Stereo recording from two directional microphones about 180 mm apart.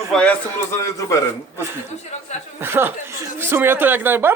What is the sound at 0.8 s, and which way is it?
Speech, 20° left (ahead or behind).